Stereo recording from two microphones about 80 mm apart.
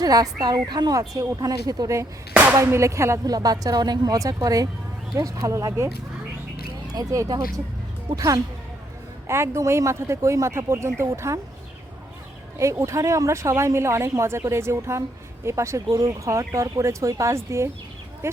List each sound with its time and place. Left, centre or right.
0.0 s a woman's voice: right
0.9 s a woman's voice: right
3.2 s a woman's voice: right
6.7 s a sound: right
8.1 s a woman's voice: right
9.2 s speech: right
12.8 s speech: right